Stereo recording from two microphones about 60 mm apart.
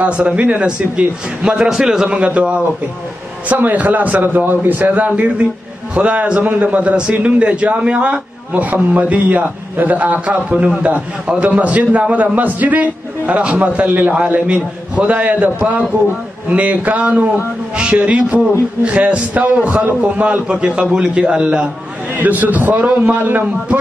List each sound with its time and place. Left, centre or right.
0.0 s a man's voice: centre
2.0 s a man's voice: centre
20.4 s a man's voice: centre
22.1 s a man's voice: right